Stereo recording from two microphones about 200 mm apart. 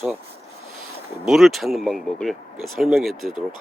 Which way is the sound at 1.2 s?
Centre (ahead or behind).